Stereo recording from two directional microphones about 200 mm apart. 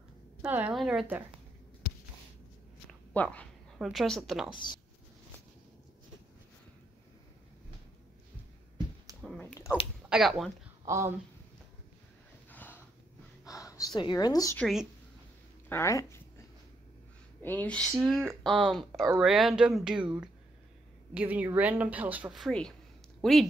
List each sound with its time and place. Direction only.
0.4 s speech: 10° right (ahead or behind)
2.9 s a woman's voice: 5° left (ahead or behind)
9.4 s a sound: 10° left (ahead or behind)
10.0 s speech: centre (ahead or behind)
10.9 s speech: 15° right (ahead or behind)
12.4 s a sound: 10° left (ahead or behind)
14.6 s speech: centre (ahead or behind)
15.7 s speech: 15° left (ahead or behind)
17.4 s speech: 10° left (ahead or behind)
21.1 s speech: 10° right (ahead or behind)